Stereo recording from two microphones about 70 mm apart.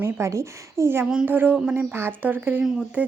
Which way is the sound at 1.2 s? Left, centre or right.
Right.